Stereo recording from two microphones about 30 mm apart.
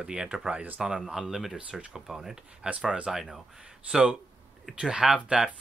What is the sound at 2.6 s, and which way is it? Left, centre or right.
Speech, right.